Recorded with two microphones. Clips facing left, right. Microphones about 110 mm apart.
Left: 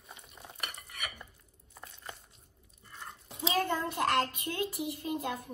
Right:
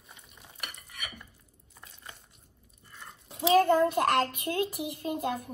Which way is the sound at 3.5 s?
50° right (ahead or behind).